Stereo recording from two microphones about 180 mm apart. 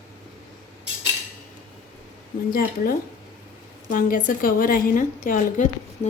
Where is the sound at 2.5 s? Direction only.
55° left (ahead or behind).